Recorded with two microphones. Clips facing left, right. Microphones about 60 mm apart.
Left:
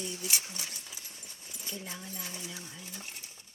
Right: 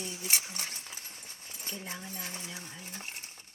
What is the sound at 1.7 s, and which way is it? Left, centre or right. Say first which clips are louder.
Speech: right 1 dB; right.